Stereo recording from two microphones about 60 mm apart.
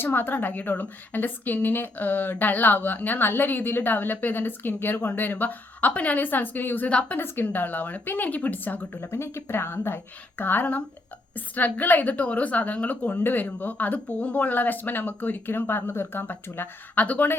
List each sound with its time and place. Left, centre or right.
0.0 s a woman's voice: left
9.0 s a woman's voice: left